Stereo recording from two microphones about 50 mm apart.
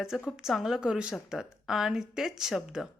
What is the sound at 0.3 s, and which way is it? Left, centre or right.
Speech, centre.